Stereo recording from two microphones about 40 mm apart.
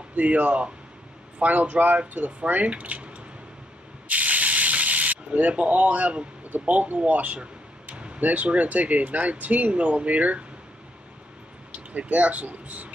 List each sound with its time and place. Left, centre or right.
0.1 s speech: right
4.1 s ratchet: right
5.5 s speech: right
12.0 s speech: right